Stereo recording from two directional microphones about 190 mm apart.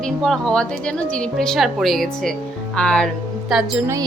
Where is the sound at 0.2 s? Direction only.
5° left (ahead or behind).